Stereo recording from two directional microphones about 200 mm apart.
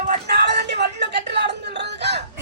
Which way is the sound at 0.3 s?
55° right (ahead or behind).